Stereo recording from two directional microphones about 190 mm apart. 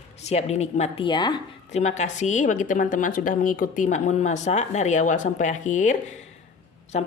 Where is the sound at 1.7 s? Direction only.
40° left (ahead or behind).